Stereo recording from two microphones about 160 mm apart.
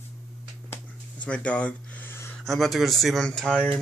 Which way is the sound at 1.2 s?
10° left (ahead or behind).